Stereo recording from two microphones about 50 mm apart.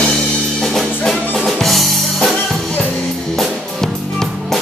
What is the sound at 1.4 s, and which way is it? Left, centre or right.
Drum kit, centre.